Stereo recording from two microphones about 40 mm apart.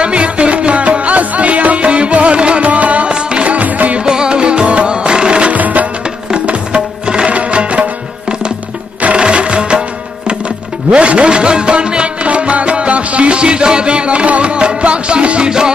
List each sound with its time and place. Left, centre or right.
0.0 s music: right
3.1 s music: right
3.5 s music: right
4.0 s music: centre
5.5 s music: right
6.3 s music: right
9.0 s music: right